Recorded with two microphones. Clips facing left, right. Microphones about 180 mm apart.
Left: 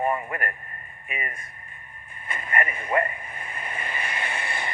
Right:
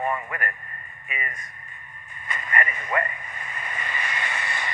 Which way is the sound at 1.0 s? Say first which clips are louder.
Left 1 dB; 50° left (ahead or behind).